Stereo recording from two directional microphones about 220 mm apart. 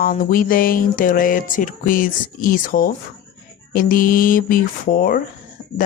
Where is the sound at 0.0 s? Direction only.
40° left (ahead or behind).